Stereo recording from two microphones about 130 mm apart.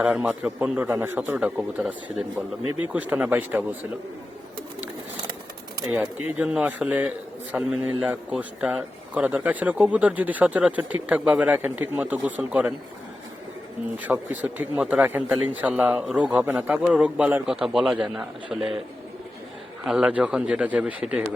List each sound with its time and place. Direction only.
0.0 s a man's voice: 10° right (ahead or behind)
0.9 s a man's voice: 25° right (ahead or behind)
1.3 s a man's voice: 10° right (ahead or behind)
5.9 s a man's voice: 10° right (ahead or behind)
14.0 s a man's voice: 10° right (ahead or behind)
19.8 s a man's voice: 5° right (ahead or behind)